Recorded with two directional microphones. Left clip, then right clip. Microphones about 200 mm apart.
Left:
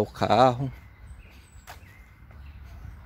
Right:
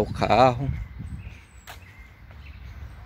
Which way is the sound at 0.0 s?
10° left (ahead or behind).